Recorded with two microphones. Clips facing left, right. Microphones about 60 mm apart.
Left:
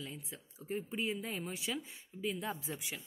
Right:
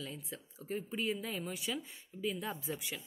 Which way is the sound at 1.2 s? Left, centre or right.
Left.